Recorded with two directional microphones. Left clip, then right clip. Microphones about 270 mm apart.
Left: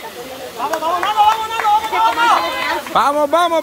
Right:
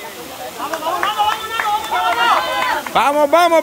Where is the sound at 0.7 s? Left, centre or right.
Left.